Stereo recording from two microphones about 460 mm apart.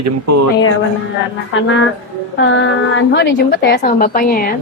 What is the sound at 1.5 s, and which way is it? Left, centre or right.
A woman's voice, left.